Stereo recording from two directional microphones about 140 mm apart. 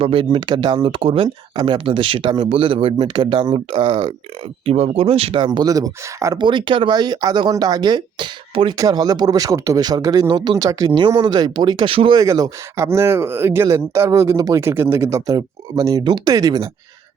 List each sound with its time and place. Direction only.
0.0 s speech: 40° right (ahead or behind)
5.5 s speech: 25° right (ahead or behind)
6.4 s speech: 35° right (ahead or behind)
12.2 s speech: 25° right (ahead or behind)